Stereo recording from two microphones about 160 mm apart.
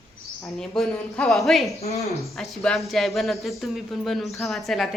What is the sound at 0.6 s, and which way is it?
A woman's voice, 5° left (ahead or behind).